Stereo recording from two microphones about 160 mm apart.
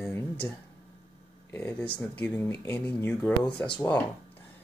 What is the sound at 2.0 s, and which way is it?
Speech, 10° left (ahead or behind).